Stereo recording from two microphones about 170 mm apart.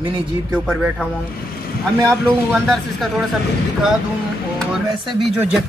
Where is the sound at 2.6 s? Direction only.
Centre (ahead or behind).